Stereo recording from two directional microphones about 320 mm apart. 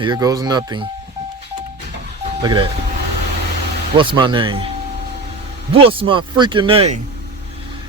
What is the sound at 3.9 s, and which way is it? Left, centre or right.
Speech, centre.